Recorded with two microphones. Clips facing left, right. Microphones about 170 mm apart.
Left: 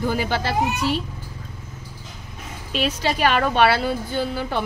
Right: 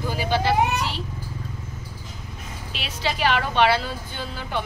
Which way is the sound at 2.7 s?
45° left (ahead or behind).